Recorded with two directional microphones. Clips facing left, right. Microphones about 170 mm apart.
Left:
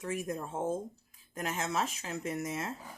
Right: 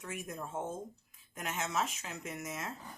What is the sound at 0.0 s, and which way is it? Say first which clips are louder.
Speech: left 6 dB; 30° left (ahead or behind).